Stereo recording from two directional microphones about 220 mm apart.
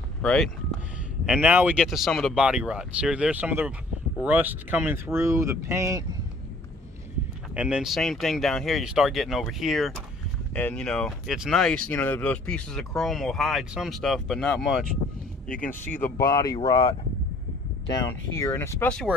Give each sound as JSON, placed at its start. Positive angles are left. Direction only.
{"t": 0.2, "sound": "speech", "side_deg": 5}
{"t": 7.5, "sound": "speech", "side_deg": -5}